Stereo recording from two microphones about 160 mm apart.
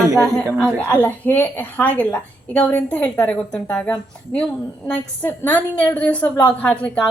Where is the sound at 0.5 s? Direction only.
5° left (ahead or behind).